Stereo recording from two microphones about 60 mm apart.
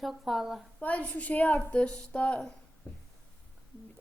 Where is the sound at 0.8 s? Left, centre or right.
Left.